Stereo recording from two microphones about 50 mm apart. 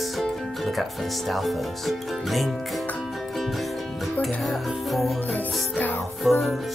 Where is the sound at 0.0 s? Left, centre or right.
Centre.